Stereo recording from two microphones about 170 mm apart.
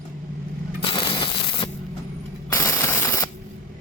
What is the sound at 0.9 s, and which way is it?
Crushing, 30° left (ahead or behind).